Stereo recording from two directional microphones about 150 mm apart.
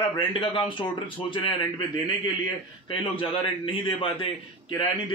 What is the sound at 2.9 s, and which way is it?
A man's voice, 35° left (ahead or behind).